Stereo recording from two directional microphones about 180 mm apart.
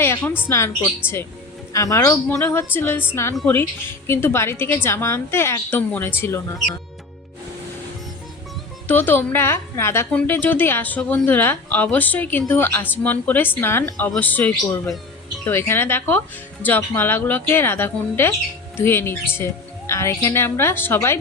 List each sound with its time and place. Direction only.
0.0 s a woman's voice: 15° left (ahead or behind)
8.9 s a woman's voice: 10° left (ahead or behind)